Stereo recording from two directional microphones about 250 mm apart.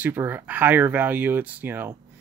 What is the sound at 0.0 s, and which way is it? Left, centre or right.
Speech, centre.